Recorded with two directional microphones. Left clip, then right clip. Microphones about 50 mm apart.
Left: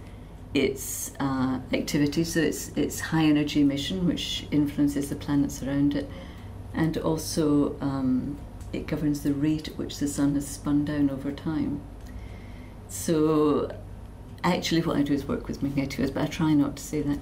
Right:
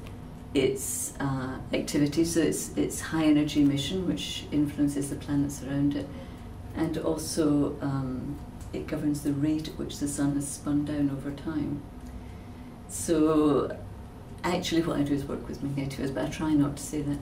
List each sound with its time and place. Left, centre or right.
0.5 s speech: left
13.0 s speech: left